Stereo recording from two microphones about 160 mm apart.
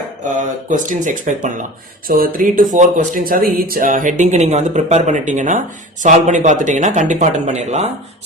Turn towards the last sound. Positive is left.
turn(degrees=-45)  # may be behind; listen again after turning